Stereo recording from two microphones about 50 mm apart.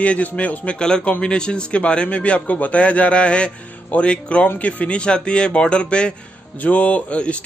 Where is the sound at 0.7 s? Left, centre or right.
Centre.